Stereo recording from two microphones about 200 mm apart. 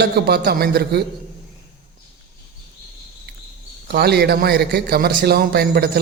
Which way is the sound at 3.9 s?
50° right (ahead or behind).